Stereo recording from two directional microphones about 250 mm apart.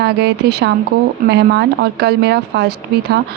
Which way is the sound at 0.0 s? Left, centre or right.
Right.